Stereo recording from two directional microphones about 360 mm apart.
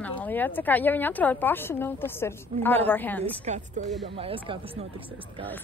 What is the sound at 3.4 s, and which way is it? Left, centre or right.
A woman's voice, centre.